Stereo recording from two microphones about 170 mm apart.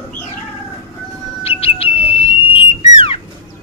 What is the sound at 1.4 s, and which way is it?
Bird, 35° left (ahead or behind).